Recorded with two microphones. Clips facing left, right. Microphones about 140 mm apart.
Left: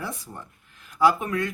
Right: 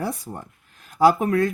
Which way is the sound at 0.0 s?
40° right (ahead or behind).